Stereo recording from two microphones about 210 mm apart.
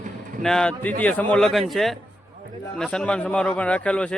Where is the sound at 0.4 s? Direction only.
5° left (ahead or behind).